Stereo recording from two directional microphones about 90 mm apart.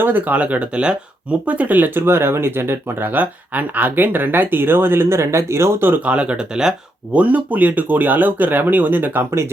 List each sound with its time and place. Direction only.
0.0 s speech: 20° right (ahead or behind)